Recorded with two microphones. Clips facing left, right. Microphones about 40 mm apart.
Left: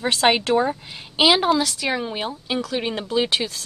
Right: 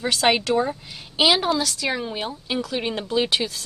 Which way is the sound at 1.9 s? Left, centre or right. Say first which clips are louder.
Left 2 dB; centre.